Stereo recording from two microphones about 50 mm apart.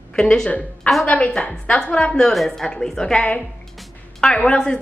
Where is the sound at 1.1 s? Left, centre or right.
Left.